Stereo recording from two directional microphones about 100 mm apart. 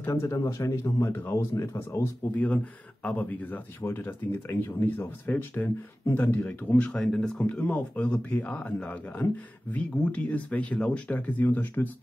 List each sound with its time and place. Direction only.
0.1 s speech: 30° left (ahead or behind)
2.3 s speech: 15° left (ahead or behind)